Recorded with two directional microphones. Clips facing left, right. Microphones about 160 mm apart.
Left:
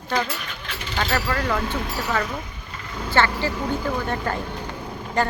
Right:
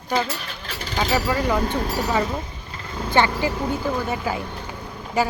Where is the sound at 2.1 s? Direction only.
25° right (ahead or behind).